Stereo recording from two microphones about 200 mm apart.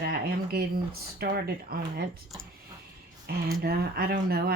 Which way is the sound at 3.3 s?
55° right (ahead or behind).